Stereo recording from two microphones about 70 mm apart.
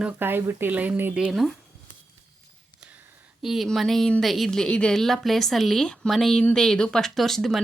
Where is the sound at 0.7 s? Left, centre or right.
Right.